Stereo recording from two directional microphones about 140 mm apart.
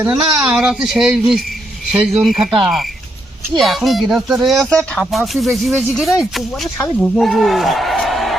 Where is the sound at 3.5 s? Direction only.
Centre (ahead or behind).